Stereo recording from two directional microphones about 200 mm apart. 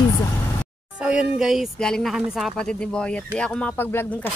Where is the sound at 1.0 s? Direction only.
5° right (ahead or behind).